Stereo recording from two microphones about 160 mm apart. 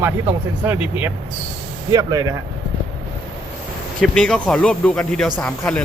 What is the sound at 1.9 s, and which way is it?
Speech, 25° right (ahead or behind).